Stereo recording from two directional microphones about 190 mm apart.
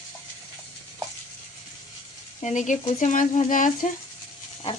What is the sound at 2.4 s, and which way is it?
Speech, 40° left (ahead or behind).